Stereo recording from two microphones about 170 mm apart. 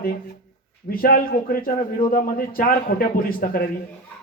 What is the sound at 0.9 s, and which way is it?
A man's voice, 60° left (ahead or behind).